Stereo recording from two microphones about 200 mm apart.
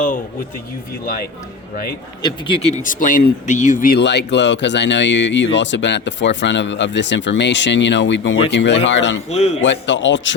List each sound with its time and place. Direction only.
1.0 s speech: 45° left (ahead or behind)
2.2 s speech: 25° left (ahead or behind)
2.8 s speech: 40° left (ahead or behind); by 9.2 s 65° left (ahead or behind)
9.3 s a man's voice: 30° left (ahead or behind)
9.6 s a man's voice: 65° left (ahead or behind)